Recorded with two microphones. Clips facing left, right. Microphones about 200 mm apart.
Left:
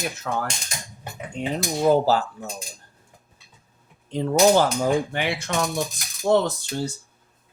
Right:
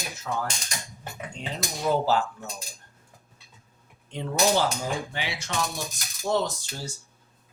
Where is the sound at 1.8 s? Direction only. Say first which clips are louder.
Left 5 dB; 35° left (ahead or behind).